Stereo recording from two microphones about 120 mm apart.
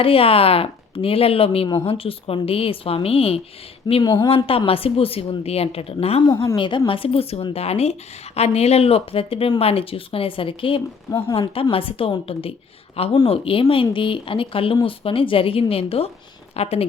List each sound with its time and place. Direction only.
0.0 s a woman's voice: 50° left (ahead or behind)
4.0 s speech: 30° left (ahead or behind)
4.4 s a woman's voice: 50° left (ahead or behind)
6.2 s a woman's voice: 35° left (ahead or behind); by 16.8 s 60° left (ahead or behind)